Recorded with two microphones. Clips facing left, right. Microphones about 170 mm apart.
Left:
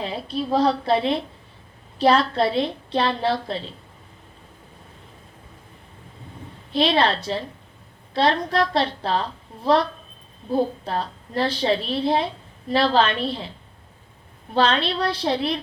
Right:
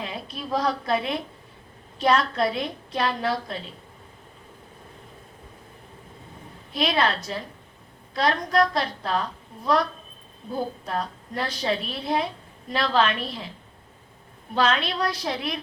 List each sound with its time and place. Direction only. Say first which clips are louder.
0.0 s a woman's voice: left 7 dB; 30° left (ahead or behind)
6.7 s a woman's voice: left 4 dB; 30° left (ahead or behind)
14.5 s a woman's voice: left 3 dB; 30° left (ahead or behind)